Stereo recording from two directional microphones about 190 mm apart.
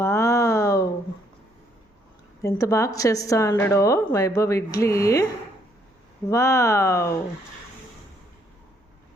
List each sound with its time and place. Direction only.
0.0 s a sound: 15° left (ahead or behind)
2.4 s a woman's voice: 15° left (ahead or behind)
6.2 s a woman's voice: 15° left (ahead or behind)